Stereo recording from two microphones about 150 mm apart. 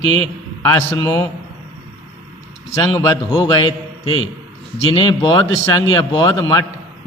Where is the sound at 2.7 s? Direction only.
20° left (ahead or behind).